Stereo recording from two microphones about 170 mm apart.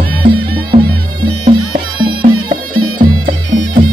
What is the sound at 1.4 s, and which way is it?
Music, 30° right (ahead or behind).